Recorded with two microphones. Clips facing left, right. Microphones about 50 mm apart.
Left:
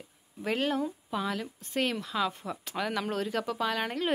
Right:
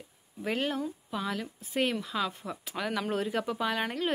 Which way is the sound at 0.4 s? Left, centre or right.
Centre.